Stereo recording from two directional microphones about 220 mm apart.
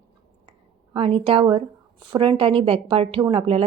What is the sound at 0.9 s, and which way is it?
A woman's voice, 25° right (ahead or behind).